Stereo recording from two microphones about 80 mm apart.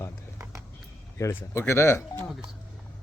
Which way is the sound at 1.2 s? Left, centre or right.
Left.